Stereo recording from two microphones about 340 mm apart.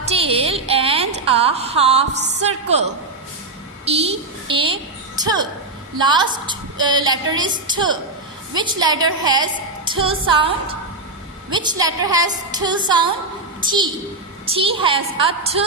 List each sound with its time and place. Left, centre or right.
0.0 s a sound: centre
2.4 s a woman's voice: centre
11.5 s a woman's voice: centre